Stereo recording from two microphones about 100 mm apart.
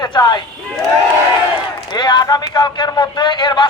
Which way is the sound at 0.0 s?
50° left (ahead or behind).